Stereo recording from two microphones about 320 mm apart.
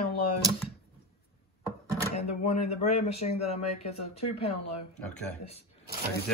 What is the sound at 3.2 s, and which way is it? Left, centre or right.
Speech, centre.